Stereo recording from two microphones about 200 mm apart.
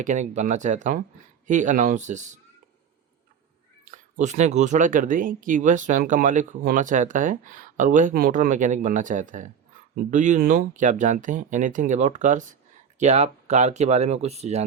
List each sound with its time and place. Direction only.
0.0 s speech: 40° right (ahead or behind)
3.9 s speech: 35° right (ahead or behind)